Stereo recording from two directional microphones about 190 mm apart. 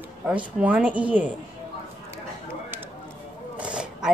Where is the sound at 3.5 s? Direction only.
5° right (ahead or behind).